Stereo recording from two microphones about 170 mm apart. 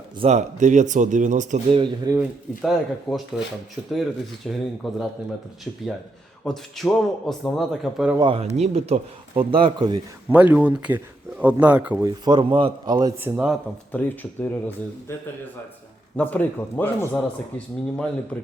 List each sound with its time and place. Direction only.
0.2 s a man's voice: 40° right (ahead or behind)
1.7 s a man's voice: 30° right (ahead or behind)
2.1 s a man's voice: centre (ahead or behind)
6.4 s a man's voice: centre (ahead or behind)
8.2 s speech: 30° right (ahead or behind)
10.2 s speech: 10° right (ahead or behind)
12.0 s a man's voice: 25° right (ahead or behind)
13.1 s speech: 10° right (ahead or behind)
13.9 s speech: 10° left (ahead or behind)
16.1 s speech: 10° left (ahead or behind)